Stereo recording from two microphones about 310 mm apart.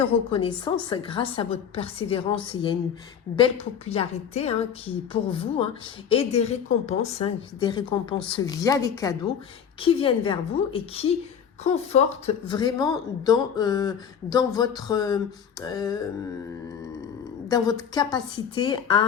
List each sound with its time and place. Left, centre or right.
0.3 s a woman's voice: centre
17.5 s speech: centre